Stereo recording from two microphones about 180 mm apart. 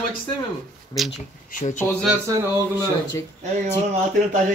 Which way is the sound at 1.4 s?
50° left (ahead or behind).